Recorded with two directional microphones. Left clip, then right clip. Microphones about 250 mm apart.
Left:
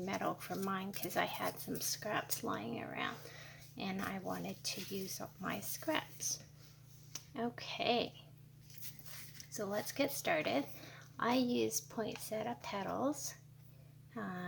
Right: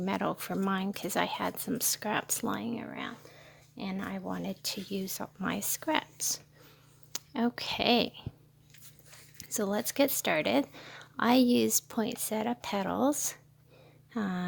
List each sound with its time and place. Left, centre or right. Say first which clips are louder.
0.0 s speech: right 7 dB; right
9.4 s speech: right 8 dB; right